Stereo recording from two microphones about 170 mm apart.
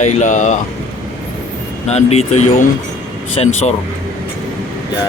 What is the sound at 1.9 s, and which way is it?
Speech, 40° left (ahead or behind).